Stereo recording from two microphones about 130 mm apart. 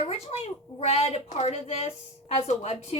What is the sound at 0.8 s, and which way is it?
Speech, 50° left (ahead or behind).